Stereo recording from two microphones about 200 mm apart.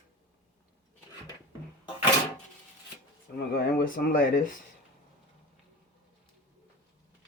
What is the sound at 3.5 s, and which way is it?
Speech, 50° left (ahead or behind).